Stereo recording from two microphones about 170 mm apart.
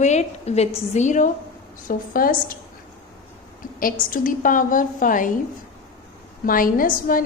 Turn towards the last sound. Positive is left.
turn(degrees=55)  # may be behind; listen again after turning